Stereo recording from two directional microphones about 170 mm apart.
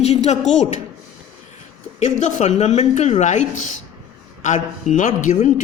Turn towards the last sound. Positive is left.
turn(degrees=45)  # may be behind; listen again after turning